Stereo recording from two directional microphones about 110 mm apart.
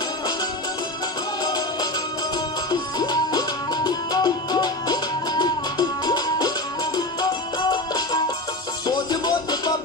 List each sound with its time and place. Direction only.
1.4 s music: 35° left (ahead or behind)